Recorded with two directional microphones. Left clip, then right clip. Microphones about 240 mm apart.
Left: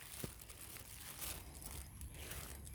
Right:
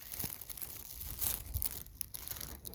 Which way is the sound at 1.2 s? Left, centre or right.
Right.